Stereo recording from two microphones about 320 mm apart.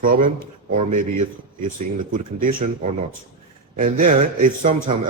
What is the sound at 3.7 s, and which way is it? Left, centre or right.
Speech, right.